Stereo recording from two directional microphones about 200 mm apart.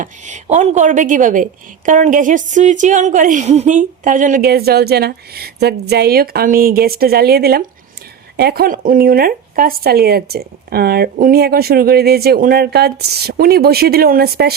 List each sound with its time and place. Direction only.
0.0 s a woman's voice: 35° right (ahead or behind); by 14.5 s 50° right (ahead or behind)